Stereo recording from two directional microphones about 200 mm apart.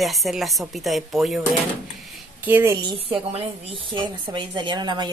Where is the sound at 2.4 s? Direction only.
15° right (ahead or behind).